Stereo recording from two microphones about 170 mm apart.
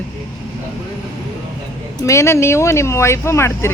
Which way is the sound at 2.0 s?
15° left (ahead or behind).